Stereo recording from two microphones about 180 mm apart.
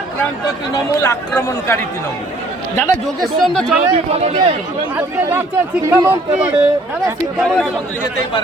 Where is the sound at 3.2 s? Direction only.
Centre (ahead or behind).